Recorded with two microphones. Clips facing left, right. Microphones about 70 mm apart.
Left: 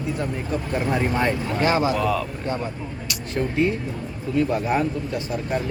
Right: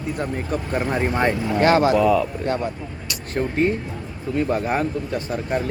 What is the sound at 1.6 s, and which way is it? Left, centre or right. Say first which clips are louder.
Speech: right 5 dB; right.